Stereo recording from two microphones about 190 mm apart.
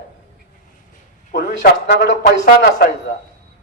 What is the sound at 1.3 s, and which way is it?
Speech, 50° left (ahead or behind).